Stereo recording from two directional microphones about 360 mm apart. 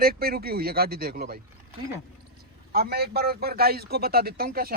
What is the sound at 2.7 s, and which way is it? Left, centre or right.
Speech, right.